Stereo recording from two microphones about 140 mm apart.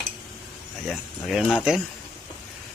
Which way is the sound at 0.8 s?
Centre (ahead or behind).